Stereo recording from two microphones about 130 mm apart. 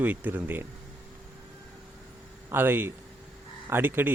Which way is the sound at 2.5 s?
15° right (ahead or behind).